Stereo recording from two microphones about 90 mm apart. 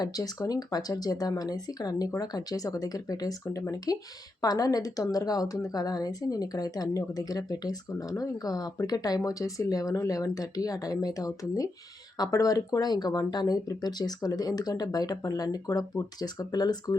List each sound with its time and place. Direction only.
0.0 s speech: 40° left (ahead or behind)